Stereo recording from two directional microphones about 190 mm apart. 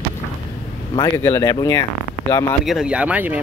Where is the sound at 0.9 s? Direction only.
15° left (ahead or behind).